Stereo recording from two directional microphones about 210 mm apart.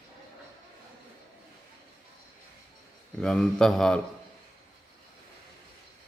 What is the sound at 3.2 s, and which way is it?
Speech, 5° left (ahead or behind).